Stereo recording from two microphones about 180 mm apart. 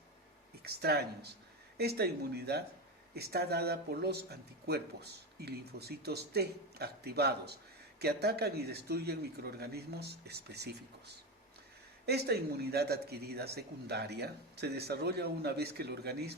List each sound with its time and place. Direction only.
0.6 s speech: 60° right (ahead or behind)
12.0 s speech: 65° right (ahead or behind)